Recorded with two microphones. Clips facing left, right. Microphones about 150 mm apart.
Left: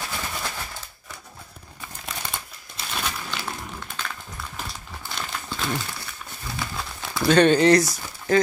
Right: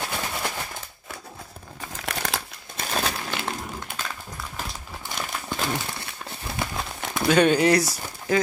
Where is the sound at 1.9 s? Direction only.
80° right.